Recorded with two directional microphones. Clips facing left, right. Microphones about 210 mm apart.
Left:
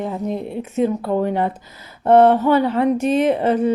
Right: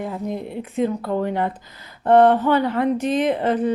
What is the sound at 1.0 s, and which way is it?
Speech, 30° left (ahead or behind).